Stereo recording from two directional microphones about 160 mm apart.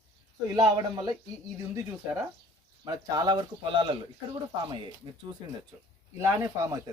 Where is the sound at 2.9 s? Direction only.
25° right (ahead or behind).